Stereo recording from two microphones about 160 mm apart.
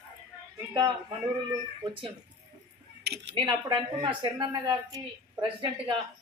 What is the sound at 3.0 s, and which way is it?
Speech, 90° right.